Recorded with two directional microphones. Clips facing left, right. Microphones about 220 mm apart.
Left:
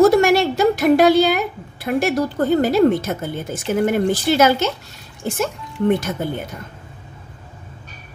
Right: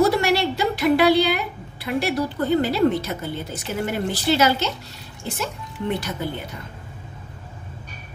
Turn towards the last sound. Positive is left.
turn(degrees=50)  # may be behind; listen again after turning